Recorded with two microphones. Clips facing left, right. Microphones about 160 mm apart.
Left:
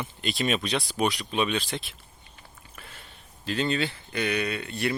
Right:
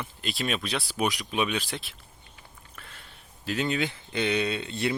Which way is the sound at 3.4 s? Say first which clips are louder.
Left 1 dB; 10° right (ahead or behind).